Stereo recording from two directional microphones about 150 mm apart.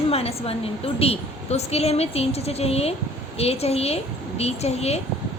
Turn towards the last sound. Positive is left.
turn(degrees=45)  # may be behind; listen again after turning